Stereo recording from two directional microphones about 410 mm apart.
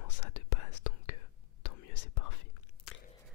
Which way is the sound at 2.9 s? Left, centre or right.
Left.